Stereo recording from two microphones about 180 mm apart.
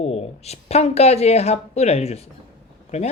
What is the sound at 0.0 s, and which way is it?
Speech, 35° left (ahead or behind).